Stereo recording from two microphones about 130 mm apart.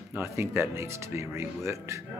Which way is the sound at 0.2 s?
20° right (ahead or behind).